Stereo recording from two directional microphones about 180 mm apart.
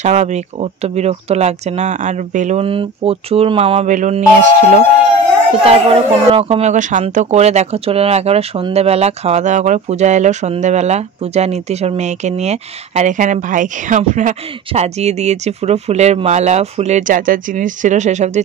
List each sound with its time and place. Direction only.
0.0 s a woman's voice: 40° right (ahead or behind)
5.6 s a woman's voice: 30° right (ahead or behind)